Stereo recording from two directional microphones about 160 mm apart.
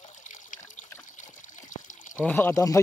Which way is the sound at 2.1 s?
10° left (ahead or behind).